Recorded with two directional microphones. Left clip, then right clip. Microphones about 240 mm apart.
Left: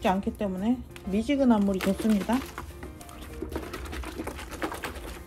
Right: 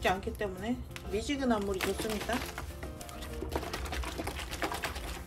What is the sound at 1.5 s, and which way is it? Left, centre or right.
Music, centre.